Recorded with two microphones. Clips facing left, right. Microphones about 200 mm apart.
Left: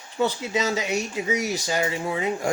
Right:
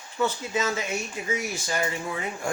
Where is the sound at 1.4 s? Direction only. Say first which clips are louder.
Left 5 dB; 40° left (ahead or behind).